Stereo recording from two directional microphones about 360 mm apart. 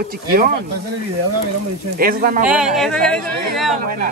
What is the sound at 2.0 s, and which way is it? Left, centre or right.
Speech, right.